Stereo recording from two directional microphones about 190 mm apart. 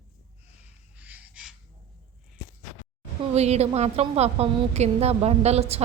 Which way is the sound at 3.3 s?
35° right (ahead or behind).